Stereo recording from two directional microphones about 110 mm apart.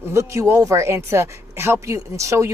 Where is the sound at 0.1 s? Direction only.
25° right (ahead or behind).